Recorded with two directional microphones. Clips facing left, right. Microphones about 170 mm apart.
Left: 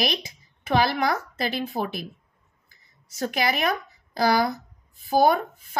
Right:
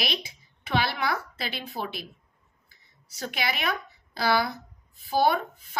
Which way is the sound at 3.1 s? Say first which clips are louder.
Left 6 dB; 45° left (ahead or behind).